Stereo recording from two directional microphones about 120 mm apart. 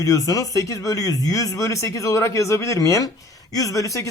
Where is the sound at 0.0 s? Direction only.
30° left (ahead or behind).